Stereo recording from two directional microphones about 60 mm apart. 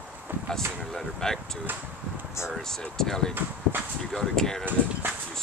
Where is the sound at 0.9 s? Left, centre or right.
Centre.